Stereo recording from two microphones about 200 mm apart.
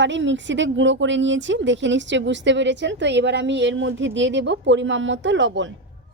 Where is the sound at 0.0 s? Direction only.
65° right (ahead or behind).